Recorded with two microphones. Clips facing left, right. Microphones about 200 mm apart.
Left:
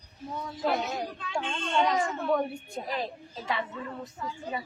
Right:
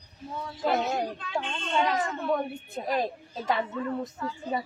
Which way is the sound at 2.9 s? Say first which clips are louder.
Right 7 dB; 45° right (ahead or behind).